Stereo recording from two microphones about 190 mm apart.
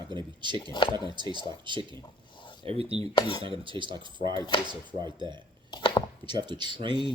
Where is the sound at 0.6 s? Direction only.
25° left (ahead or behind).